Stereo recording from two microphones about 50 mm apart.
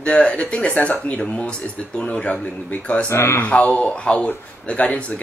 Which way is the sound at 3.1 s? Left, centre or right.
Left.